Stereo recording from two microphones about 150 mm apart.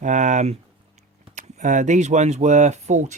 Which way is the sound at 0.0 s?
55° right (ahead or behind).